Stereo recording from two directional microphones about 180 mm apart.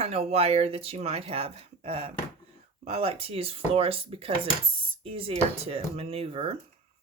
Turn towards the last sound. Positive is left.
turn(degrees=-30)  # may be behind; listen again after turning